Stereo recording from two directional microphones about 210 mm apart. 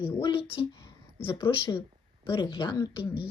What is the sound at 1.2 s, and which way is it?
Speech, 25° left (ahead or behind).